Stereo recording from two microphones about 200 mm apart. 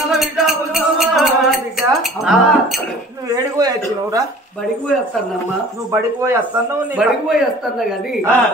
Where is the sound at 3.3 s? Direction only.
15° right (ahead or behind).